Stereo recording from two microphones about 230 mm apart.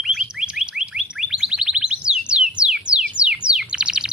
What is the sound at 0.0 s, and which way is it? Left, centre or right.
Bird, centre.